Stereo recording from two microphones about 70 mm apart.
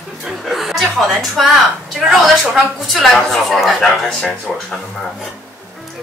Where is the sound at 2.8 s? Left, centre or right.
Centre.